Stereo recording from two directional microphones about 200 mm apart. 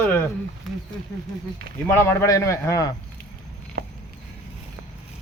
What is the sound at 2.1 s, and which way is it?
Speech, 15° left (ahead or behind).